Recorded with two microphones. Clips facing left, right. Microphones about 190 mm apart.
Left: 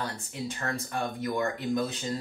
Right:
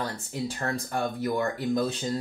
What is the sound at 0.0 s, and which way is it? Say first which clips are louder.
Speech: right 3 dB; 35° right (ahead or behind).